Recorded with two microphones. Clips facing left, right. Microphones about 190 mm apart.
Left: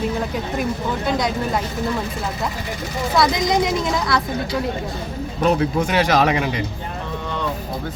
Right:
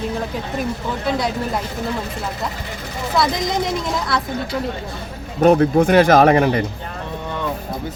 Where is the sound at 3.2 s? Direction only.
Centre (ahead or behind).